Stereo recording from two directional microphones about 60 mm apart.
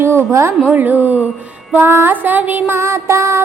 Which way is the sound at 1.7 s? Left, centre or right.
Right.